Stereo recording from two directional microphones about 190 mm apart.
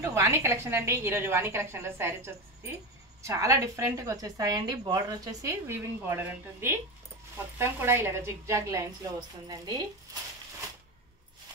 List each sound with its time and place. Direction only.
0.0 s a woman's voice: 15° right (ahead or behind)